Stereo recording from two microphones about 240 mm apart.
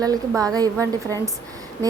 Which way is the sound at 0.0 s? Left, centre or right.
Centre.